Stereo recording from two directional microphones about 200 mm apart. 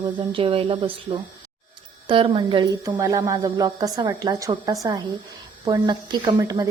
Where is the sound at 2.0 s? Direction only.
25° right (ahead or behind).